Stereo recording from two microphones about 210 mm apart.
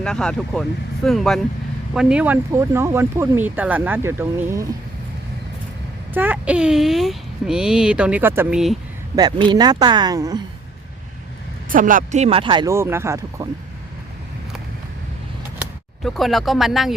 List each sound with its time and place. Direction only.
0.0 s speech: 5° left (ahead or behind)
6.1 s speech: 5° right (ahead or behind)
9.1 s speech: 20° right (ahead or behind)
11.7 s speech: 40° right (ahead or behind); by 13.5 s 15° right (ahead or behind)
16.0 s speech: centre (ahead or behind)